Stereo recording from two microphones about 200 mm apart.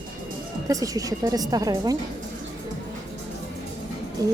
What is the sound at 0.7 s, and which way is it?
A woman's voice, 15° right (ahead or behind).